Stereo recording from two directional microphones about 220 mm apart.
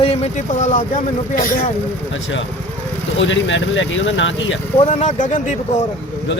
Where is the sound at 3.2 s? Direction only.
55° left (ahead or behind).